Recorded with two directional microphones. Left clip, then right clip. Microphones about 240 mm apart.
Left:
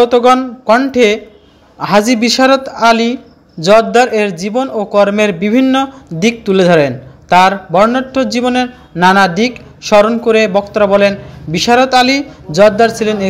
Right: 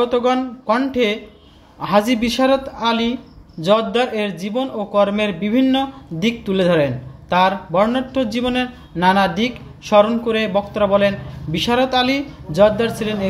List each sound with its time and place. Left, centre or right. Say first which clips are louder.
0.0 s speech: left 9 dB; left